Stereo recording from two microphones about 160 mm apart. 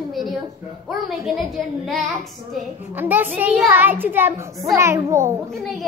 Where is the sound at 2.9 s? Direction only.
10° right (ahead or behind).